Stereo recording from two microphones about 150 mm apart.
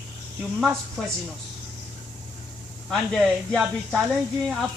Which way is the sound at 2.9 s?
Centre (ahead or behind).